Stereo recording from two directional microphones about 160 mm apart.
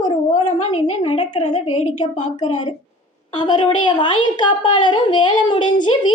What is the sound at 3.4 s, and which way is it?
A woman's voice, 30° left (ahead or behind).